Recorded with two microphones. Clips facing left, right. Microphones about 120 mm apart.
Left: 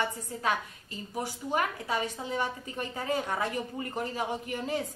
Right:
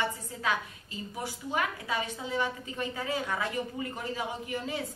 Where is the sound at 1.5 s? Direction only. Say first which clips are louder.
Left 2 dB; 40° left (ahead or behind).